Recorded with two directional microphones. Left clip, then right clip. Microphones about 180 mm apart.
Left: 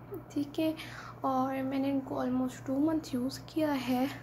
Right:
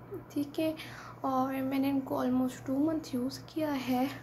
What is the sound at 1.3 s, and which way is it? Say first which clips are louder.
Speech: right 1 dB; centre (ahead or behind).